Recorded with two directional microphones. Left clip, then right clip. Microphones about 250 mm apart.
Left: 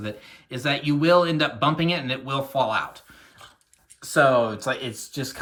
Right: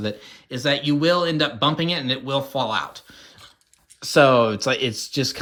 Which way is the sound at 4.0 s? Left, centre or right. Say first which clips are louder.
Right 3 dB; right.